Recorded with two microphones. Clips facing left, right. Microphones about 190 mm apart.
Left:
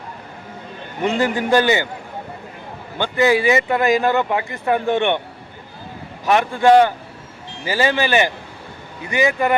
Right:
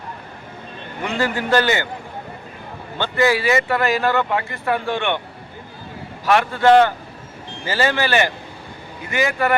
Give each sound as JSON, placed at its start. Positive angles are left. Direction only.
{"t": 1.0, "sound": "speech", "side_deg": 20}
{"t": 3.0, "sound": "speech", "side_deg": 20}
{"t": 6.2, "sound": "speech", "side_deg": 15}